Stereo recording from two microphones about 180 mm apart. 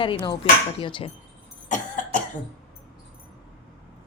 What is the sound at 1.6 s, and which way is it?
Cough, 45° left (ahead or behind).